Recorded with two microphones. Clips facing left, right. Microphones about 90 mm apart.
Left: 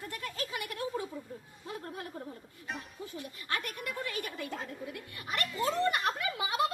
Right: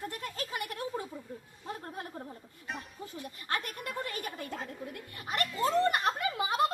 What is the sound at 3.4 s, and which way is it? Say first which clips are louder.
Speech: right 1 dB; 40° right (ahead or behind).